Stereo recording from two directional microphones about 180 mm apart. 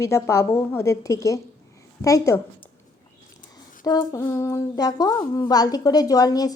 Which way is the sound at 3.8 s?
20° left (ahead or behind).